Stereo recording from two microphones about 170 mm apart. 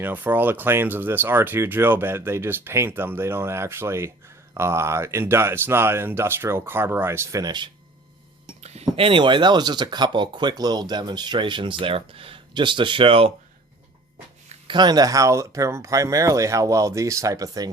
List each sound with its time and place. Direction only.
0.0 s speech: 10° right (ahead or behind)
8.6 s speech: 40° right (ahead or behind)
14.7 s speech: 25° right (ahead or behind)